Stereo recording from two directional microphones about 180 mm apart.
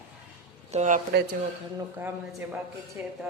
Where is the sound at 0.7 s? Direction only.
40° right (ahead or behind).